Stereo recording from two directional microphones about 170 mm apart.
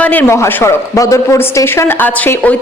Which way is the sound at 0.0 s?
10° left (ahead or behind).